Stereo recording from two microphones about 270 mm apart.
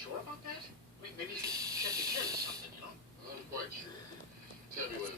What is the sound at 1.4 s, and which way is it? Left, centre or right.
Hiss, centre.